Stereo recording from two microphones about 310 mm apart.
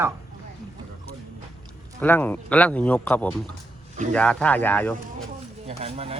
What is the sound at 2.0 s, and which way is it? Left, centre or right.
Speech, centre.